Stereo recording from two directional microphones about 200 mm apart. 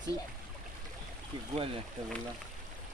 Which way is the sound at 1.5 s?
30° right (ahead or behind).